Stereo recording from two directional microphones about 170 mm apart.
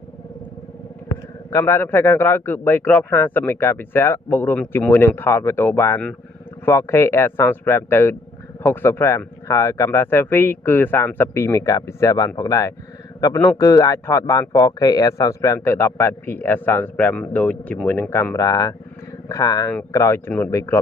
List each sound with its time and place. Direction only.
1.0 s a man's voice: 15° left (ahead or behind)